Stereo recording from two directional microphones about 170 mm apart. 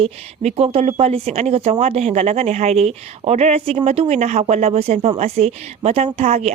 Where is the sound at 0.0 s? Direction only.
35° right (ahead or behind).